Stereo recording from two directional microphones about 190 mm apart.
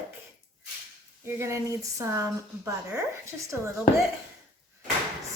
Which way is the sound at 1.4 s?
15° right (ahead or behind).